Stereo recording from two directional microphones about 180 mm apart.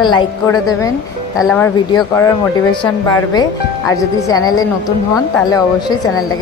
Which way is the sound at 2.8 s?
25° left (ahead or behind).